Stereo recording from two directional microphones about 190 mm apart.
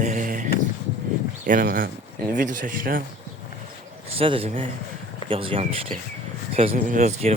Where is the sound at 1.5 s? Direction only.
50° right (ahead or behind).